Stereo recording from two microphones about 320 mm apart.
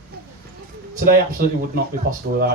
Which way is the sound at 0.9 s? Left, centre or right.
Right.